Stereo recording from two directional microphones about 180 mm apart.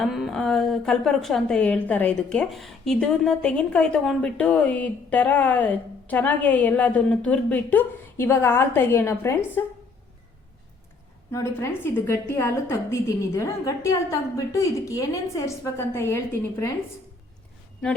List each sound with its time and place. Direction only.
0.0 s a woman's voice: centre (ahead or behind)
11.3 s a woman's voice: 15° left (ahead or behind)